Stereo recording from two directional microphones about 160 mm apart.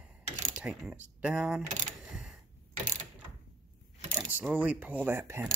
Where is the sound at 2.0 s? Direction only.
5° right (ahead or behind).